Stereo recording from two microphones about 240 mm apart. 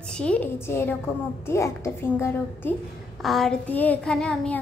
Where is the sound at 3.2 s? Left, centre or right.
Centre.